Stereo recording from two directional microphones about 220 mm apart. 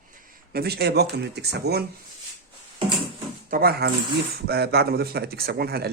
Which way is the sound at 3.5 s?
45° right (ahead or behind).